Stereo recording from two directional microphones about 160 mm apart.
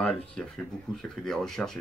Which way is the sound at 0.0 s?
5° left (ahead or behind).